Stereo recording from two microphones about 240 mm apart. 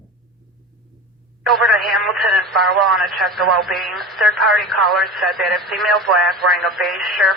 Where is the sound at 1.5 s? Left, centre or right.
Centre.